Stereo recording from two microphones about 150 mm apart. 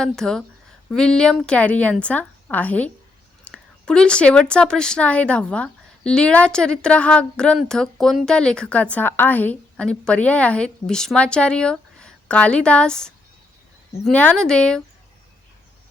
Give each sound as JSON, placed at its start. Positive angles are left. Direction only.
{"t": 0.0, "sound": "a woman's voice", "side_deg": 5}